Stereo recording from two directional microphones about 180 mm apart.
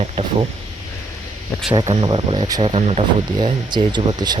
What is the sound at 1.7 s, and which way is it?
Speech, 30° right (ahead or behind).